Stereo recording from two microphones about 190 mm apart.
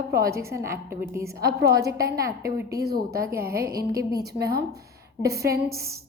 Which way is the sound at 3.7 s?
20° right (ahead or behind).